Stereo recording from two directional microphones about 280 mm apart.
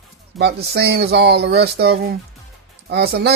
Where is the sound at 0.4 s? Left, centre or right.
Right.